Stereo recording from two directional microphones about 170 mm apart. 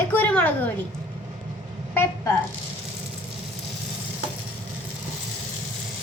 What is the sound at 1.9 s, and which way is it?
Speech, 10° left (ahead or behind).